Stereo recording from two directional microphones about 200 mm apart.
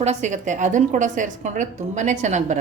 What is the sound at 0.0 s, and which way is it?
A woman's voice, 35° right (ahead or behind).